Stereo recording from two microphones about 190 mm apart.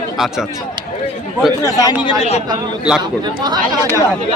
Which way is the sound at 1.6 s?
20° left (ahead or behind).